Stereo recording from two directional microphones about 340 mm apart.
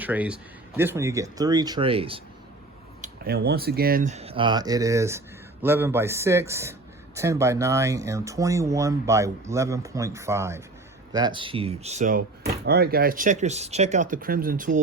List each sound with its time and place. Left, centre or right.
0.0 s a man's voice: centre
3.0 s speech: right